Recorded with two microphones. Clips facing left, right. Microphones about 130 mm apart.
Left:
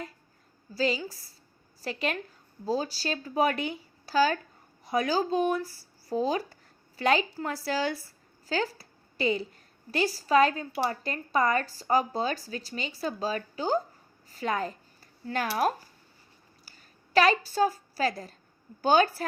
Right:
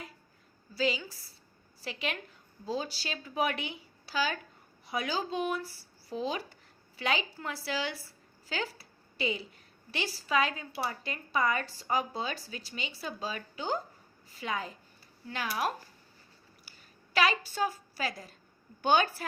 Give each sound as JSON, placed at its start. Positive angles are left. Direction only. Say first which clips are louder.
{"t": 0.7, "sound": "a woman's voice", "louder": "left 3 dB", "side_deg": 40}
{"t": 17.2, "sound": "speech", "louder": "left 6 dB", "side_deg": 40}